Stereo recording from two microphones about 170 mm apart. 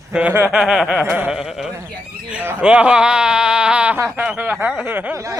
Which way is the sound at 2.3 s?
10° right (ahead or behind).